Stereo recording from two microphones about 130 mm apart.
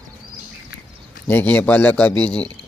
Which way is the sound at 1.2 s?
10° left (ahead or behind).